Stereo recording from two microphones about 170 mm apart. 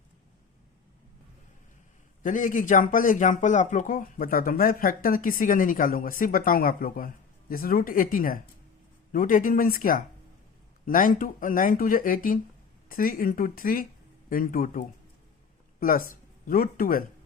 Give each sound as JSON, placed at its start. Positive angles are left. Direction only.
{"t": 2.2, "sound": "speech", "side_deg": 50}